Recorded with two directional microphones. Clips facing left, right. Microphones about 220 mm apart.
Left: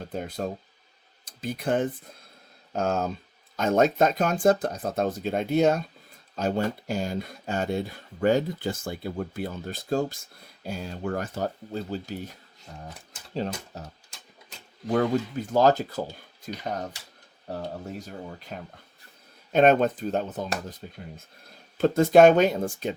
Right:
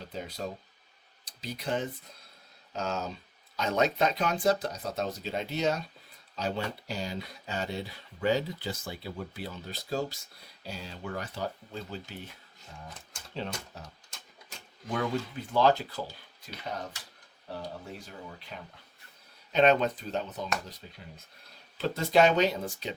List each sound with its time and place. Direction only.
0.0 s speech: 50° left (ahead or behind)
14.8 s speech: 45° left (ahead or behind)
17.5 s speech: 45° left (ahead or behind)